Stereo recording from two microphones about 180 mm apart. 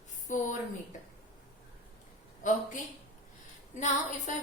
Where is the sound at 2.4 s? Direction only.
45° left (ahead or behind).